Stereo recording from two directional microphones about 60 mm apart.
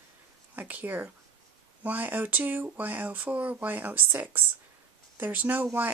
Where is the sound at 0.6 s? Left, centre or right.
Right.